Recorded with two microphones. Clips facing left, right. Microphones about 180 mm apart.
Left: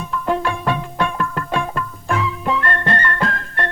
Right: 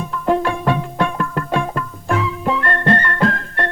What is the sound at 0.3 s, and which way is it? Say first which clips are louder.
Music: right 4 dB; 40° right (ahead or behind).